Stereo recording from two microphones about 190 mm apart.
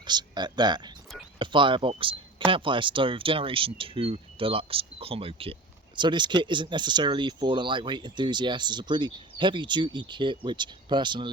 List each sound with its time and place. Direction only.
0.0 s speech: 25° right (ahead or behind)